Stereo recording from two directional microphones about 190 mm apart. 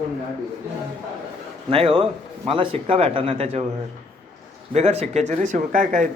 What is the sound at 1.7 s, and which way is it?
Speech, 30° right (ahead or behind).